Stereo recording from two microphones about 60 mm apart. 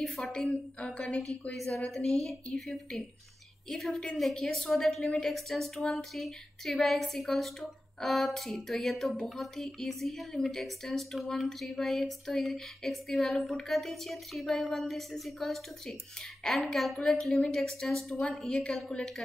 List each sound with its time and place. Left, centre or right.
0.0 s a woman's voice: centre
0.5 s a woman's voice: centre